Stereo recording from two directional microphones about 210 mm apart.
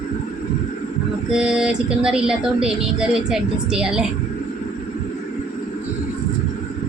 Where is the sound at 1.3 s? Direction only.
5° right (ahead or behind).